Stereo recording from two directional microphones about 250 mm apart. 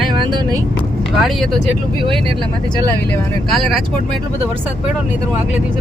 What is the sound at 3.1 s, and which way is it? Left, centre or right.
Speech, centre.